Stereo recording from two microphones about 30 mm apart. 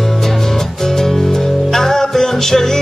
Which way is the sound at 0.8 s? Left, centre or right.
Centre.